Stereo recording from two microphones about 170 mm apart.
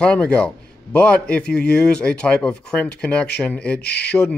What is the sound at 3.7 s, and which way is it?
Speech, 75° left (ahead or behind).